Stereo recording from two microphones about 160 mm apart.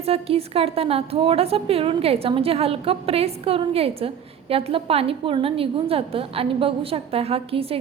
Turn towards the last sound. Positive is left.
turn(degrees=-35)  # may be behind; listen again after turning